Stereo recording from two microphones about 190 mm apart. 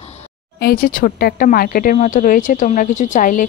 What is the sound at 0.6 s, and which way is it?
Speech, 55° left (ahead or behind).